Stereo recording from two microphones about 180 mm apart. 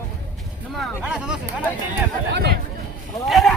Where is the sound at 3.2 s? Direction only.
Centre (ahead or behind).